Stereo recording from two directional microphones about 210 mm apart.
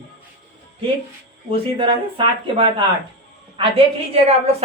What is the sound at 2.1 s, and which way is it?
Speech, 25° right (ahead or behind).